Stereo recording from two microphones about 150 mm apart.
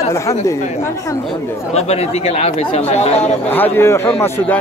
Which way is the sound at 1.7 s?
45° left (ahead or behind).